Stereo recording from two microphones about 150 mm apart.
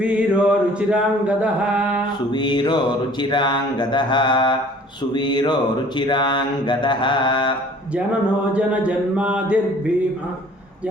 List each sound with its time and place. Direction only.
0.0 s mantra: 5° right (ahead or behind)
2.3 s a sound: 30° left (ahead or behind)
6.0 s mantra: 30° left (ahead or behind)
8.5 s speech: 10° right (ahead or behind)